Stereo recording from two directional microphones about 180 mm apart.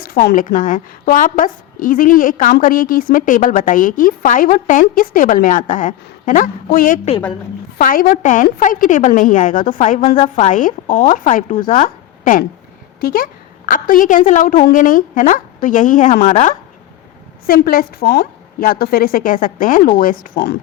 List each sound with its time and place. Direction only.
0.0 s a woman's voice: 55° left (ahead or behind)